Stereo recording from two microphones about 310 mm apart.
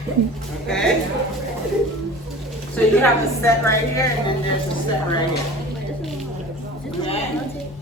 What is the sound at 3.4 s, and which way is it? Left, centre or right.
Speech, centre.